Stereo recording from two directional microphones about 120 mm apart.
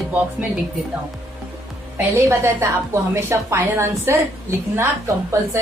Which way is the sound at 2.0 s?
20° right (ahead or behind).